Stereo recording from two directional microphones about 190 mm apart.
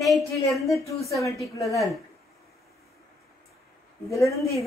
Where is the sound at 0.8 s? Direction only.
15° left (ahead or behind).